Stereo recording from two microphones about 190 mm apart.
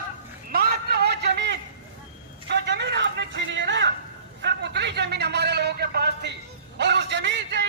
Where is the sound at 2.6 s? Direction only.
65° right (ahead or behind).